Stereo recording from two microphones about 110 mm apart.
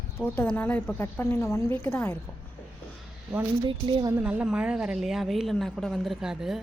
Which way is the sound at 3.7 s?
50° right (ahead or behind).